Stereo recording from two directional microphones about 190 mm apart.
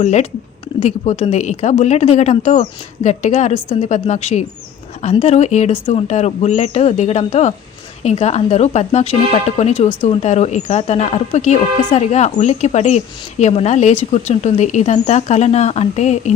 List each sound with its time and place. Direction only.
0.0 s a woman's voice: 35° left (ahead or behind)